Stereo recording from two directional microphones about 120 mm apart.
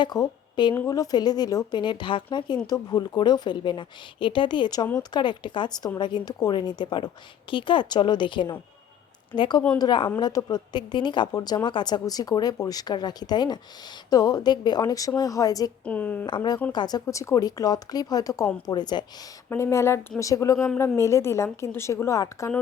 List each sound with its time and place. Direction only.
0.0 s speech: 35° left (ahead or behind)
15.8 s a woman's voice: 15° left (ahead or behind)
16.2 s speech: 40° left (ahead or behind)
19.5 s a woman's voice: 25° left (ahead or behind)